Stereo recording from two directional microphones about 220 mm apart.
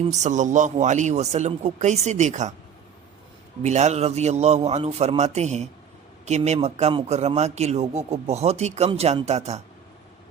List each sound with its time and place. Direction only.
0.0 s speech: 30° right (ahead or behind)
3.6 s a man's voice: 30° right (ahead or behind)